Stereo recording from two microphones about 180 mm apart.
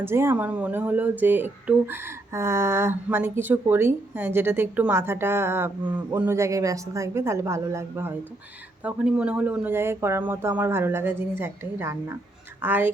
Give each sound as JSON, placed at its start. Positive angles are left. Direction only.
{"t": 0.0, "sound": "speech", "side_deg": -15}